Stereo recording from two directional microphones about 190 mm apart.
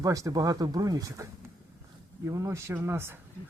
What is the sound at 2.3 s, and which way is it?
Speech, 15° right (ahead or behind).